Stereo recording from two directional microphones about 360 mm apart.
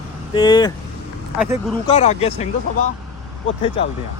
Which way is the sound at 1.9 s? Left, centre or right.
Centre.